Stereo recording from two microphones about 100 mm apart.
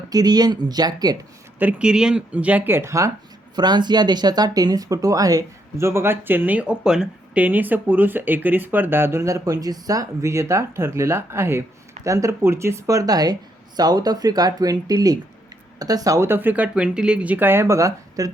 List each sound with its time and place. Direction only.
0.1 s speech: 40° right (ahead or behind)
1.5 s speech: 15° right (ahead or behind); by 3.1 s 30° right (ahead or behind)
3.5 s speech: 45° right (ahead or behind)